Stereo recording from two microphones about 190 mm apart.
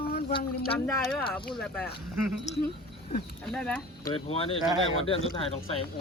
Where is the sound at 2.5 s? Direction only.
35° left (ahead or behind).